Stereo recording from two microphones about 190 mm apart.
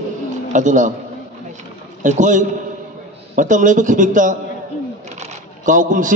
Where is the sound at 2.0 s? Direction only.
40° right (ahead or behind).